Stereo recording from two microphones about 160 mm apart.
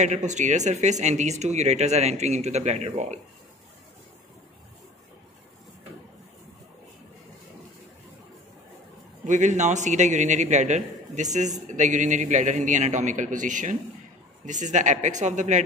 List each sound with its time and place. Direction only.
0.0 s speech: 45° right (ahead or behind)
9.2 s speech: 50° right (ahead or behind)